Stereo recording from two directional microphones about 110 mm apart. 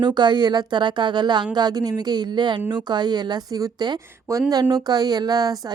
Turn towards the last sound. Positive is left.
turn(degrees=-35)  # may be behind; listen again after turning